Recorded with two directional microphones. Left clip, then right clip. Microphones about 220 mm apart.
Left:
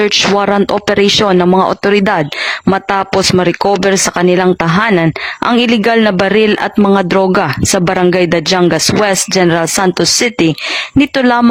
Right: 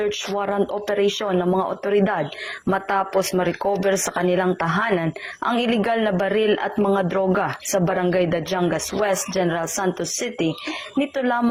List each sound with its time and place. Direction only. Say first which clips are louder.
0.0 s speech: left 13 dB; 45° left (ahead or behind)